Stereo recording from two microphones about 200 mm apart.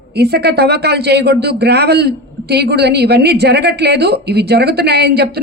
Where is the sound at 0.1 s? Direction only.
55° right (ahead or behind).